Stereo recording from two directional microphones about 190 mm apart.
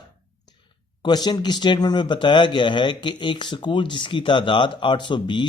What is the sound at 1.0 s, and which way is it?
Speech, 20° left (ahead or behind).